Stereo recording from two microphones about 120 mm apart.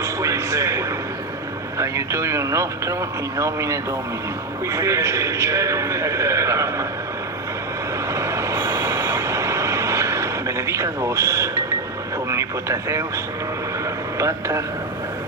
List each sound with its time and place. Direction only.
0.0 s a sound: 25° right (ahead or behind)
1.8 s a man's voice: 25° right (ahead or behind)
8.1 s train: 25° right (ahead or behind)
12.3 s speech: 25° right (ahead or behind)
14.2 s a man's voice: 25° right (ahead or behind)